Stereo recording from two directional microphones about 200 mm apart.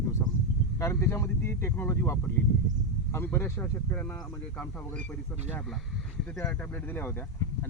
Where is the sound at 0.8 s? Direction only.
15° left (ahead or behind).